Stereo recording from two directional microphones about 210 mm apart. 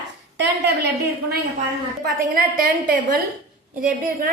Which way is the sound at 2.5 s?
45° right (ahead or behind).